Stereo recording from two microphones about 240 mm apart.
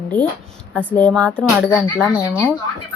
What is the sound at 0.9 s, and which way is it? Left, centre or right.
Speech, centre.